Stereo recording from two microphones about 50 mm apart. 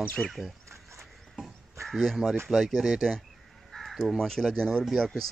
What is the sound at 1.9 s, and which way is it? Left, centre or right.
Speech, centre.